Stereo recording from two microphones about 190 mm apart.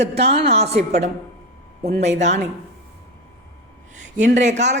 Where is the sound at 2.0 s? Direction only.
35° right (ahead or behind).